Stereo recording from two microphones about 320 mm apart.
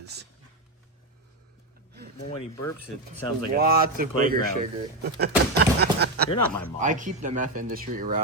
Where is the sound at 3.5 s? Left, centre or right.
Right.